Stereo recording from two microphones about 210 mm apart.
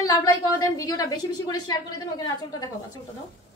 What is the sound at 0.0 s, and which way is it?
A woman's voice, 15° left (ahead or behind).